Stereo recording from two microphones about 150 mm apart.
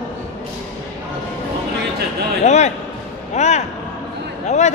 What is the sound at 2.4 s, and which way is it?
A man's voice, 50° left (ahead or behind).